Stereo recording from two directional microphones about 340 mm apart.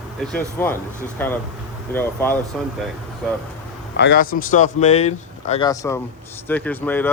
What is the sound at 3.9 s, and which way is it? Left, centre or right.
Speech, left.